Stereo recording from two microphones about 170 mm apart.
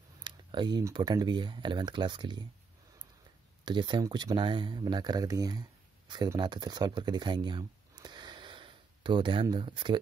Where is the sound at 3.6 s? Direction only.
25° right (ahead or behind).